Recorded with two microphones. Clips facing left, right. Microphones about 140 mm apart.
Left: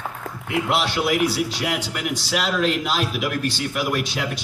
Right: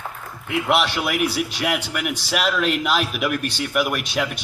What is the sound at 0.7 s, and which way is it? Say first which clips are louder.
A man's voice: right 1 dB; 60° right (ahead or behind).